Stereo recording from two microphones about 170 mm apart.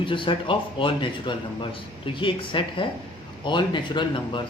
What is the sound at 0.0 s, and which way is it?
Speech, 30° left (ahead or behind).